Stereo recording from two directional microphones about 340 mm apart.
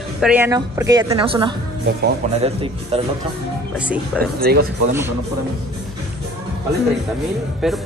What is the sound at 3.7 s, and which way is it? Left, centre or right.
Speech, centre.